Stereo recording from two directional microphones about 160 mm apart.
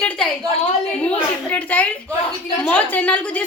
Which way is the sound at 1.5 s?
10° left (ahead or behind).